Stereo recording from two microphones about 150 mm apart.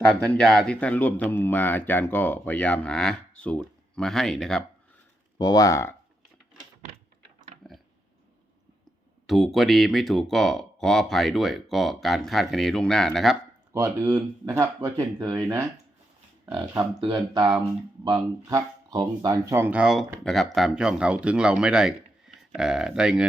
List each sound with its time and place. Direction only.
0.2 s speech: 5° left (ahead or behind)
5.4 s speech: 25° left (ahead or behind)
7.6 s a sound: centre (ahead or behind)
9.2 s speech: centre (ahead or behind)
13.7 s speech: 20° right (ahead or behind)
17.3 s speech: 30° right (ahead or behind); by 23.2 s 5° right (ahead or behind)